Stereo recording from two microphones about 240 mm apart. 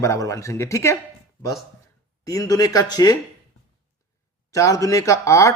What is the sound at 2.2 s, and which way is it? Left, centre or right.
Speech, centre.